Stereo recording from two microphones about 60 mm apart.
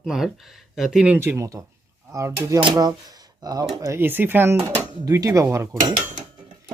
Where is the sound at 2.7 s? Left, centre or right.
Right.